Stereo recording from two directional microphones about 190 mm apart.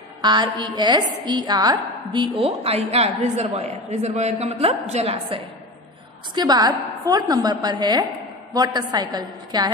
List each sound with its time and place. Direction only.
0.2 s a woman's voice: 25° right (ahead or behind)
6.3 s a woman's voice: 20° right (ahead or behind)